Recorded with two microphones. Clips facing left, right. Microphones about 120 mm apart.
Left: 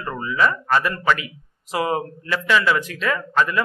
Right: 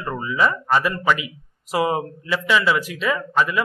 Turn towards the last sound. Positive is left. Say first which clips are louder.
# even
turn(degrees=-10)  # may be behind; listen again after turning